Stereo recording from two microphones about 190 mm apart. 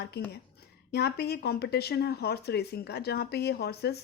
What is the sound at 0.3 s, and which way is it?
A woman's voice, 55° left (ahead or behind).